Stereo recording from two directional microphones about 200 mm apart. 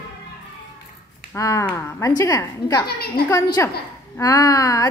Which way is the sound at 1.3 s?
15° left (ahead or behind).